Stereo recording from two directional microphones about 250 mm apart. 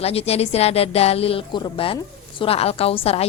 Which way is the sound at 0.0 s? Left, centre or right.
Left.